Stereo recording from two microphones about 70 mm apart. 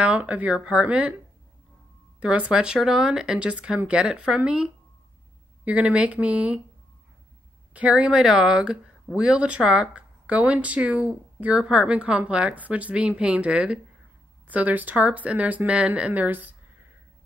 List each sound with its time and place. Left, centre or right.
0.0 s speech: centre
2.1 s speech: centre
7.7 s speech: centre